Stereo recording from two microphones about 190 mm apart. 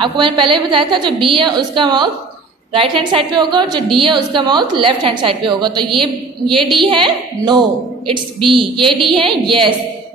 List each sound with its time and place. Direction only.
0.0 s a woman's voice: 25° right (ahead or behind)